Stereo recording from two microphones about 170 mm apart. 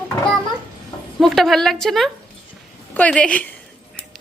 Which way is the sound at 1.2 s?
Centre (ahead or behind).